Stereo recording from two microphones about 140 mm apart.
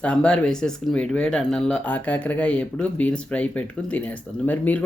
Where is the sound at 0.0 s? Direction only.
10° left (ahead or behind).